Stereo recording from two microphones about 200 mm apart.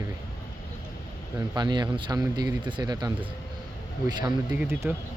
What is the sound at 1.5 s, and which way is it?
Speech, 20° right (ahead or behind).